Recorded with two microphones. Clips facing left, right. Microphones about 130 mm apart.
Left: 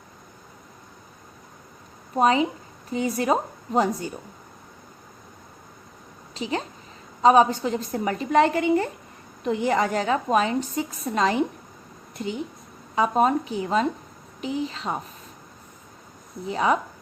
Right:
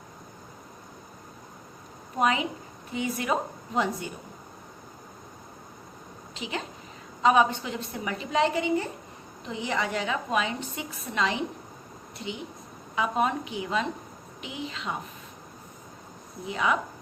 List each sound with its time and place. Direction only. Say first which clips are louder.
2.1 s a woman's voice: left 6 dB; 35° left (ahead or behind)
6.3 s a woman's voice: left 6 dB; 40° left (ahead or behind)
16.5 s a woman's voice: left 5 dB; 35° left (ahead or behind)